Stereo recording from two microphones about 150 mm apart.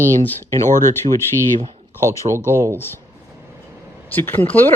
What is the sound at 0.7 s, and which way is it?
Speech, 60° right (ahead or behind).